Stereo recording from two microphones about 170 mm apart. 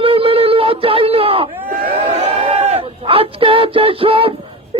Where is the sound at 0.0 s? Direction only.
35° right (ahead or behind).